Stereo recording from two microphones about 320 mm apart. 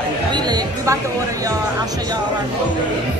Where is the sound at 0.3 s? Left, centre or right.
Centre.